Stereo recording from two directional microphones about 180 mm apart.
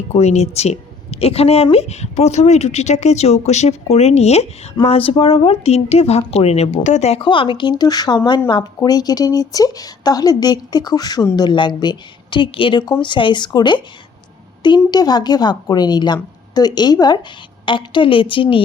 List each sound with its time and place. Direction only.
0.1 s a woman's voice: 35° left (ahead or behind)